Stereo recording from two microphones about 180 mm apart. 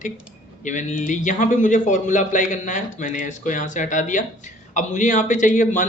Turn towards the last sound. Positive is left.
turn(degrees=45)  # may be behind; listen again after turning